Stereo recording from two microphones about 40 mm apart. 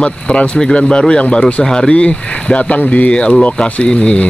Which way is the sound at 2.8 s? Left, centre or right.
Left.